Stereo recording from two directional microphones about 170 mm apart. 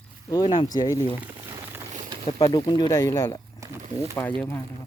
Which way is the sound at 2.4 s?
25° left (ahead or behind).